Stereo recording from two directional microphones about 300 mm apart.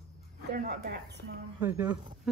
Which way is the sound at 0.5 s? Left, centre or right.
Right.